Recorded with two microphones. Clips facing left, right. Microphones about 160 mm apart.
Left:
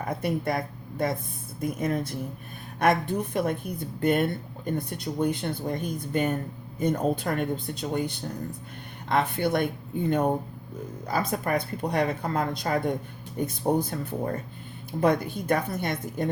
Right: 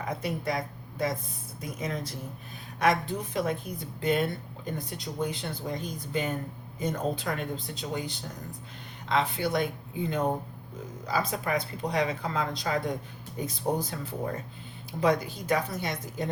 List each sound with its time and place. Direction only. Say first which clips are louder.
0.0 s a woman's voice: left 4 dB; 55° left (ahead or behind)